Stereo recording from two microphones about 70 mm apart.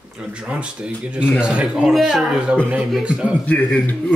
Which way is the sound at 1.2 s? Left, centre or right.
Centre.